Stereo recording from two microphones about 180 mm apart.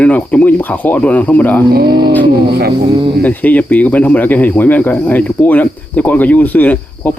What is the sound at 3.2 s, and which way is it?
Speech, 10° left (ahead or behind).